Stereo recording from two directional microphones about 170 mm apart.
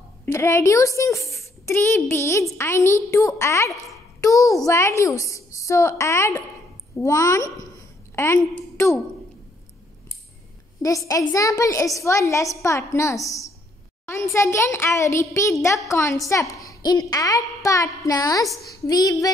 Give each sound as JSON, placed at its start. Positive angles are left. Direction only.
{"t": 0.2, "sound": "a child's voice", "side_deg": 15}
{"t": 11.1, "sound": "a woman's voice", "side_deg": 20}